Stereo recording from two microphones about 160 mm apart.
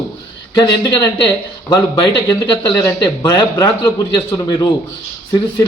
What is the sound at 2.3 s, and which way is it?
A man's voice, 20° left (ahead or behind).